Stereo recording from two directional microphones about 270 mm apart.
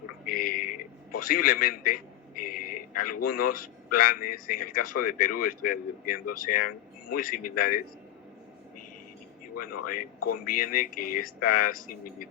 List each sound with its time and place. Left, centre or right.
0.3 s a sound: left
3.2 s a man's voice: left
3.9 s speech: left
9.6 s a man's voice: left
10.4 s speech: left